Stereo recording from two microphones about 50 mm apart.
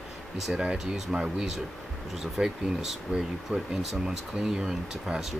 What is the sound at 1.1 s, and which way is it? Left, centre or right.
Speech, centre.